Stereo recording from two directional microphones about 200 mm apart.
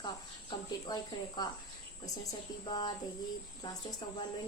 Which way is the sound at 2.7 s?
20° left (ahead or behind).